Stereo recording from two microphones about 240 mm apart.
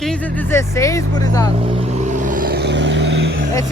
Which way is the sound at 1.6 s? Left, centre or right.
Right.